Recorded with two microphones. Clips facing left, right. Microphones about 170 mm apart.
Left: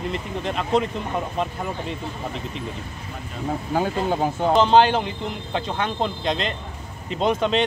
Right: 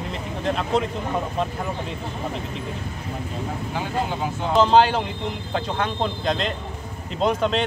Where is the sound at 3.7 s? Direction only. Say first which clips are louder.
Left 5 dB; 45° left (ahead or behind).